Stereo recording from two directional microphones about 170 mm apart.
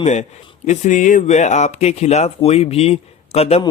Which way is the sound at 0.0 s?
45° left (ahead or behind).